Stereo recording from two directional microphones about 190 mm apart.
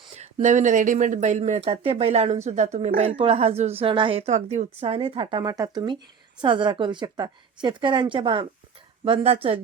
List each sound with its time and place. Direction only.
0.2 s a woman's voice: 35° right (ahead or behind)